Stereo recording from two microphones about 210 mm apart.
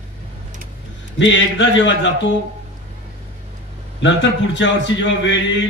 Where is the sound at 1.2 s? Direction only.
60° left (ahead or behind).